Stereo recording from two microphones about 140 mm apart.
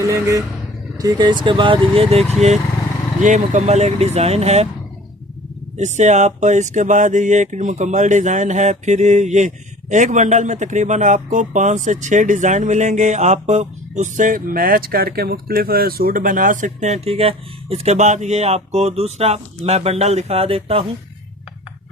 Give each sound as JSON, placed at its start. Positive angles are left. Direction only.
{"t": 0.1, "sound": "speech", "side_deg": -20}
{"t": 3.2, "sound": "speech", "side_deg": -60}
{"t": 5.7, "sound": "speech", "side_deg": -55}